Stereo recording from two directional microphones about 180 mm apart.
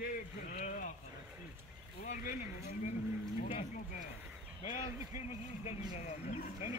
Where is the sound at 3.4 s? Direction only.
40° left (ahead or behind).